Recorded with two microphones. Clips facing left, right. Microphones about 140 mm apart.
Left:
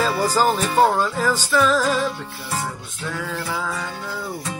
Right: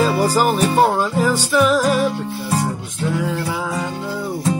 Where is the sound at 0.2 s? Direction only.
10° right (ahead or behind).